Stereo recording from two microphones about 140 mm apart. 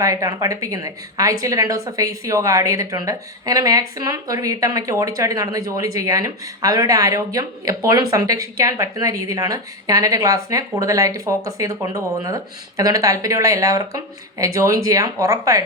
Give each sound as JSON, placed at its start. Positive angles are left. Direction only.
{"t": 0.0, "sound": "speech", "side_deg": -25}